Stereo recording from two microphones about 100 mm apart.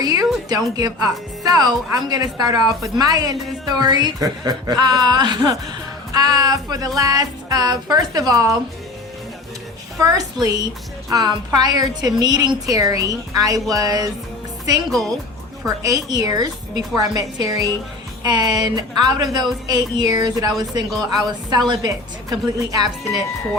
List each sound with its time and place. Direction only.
0.0 s a sound: 40° right (ahead or behind)
1.5 s a woman's voice: 40° right (ahead or behind)
10.0 s a woman's voice: 35° right (ahead or behind)
14.8 s a woman's voice: centre (ahead or behind)
15.8 s a woman's voice: 35° right (ahead or behind)